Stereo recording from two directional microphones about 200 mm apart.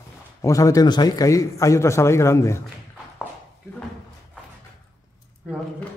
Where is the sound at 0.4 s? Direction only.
15° left (ahead or behind).